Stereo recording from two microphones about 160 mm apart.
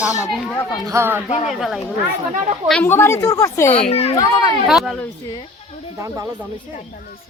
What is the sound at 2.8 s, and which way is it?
Speech, 15° left (ahead or behind).